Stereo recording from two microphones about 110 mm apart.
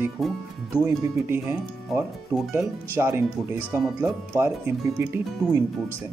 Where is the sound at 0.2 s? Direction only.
Centre (ahead or behind).